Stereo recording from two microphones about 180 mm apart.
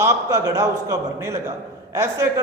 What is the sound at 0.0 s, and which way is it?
A man's voice, 15° right (ahead or behind).